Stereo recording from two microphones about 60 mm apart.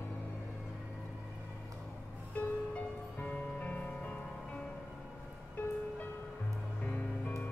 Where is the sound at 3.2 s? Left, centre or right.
Left.